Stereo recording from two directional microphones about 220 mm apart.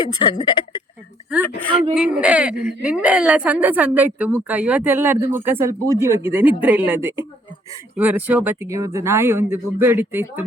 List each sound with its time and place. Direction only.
0.0 s speech: 20° left (ahead or behind)
2.0 s a woman's voice: 5° right (ahead or behind)